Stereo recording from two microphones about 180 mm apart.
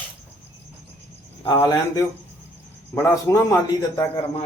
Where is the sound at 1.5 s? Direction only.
20° left (ahead or behind).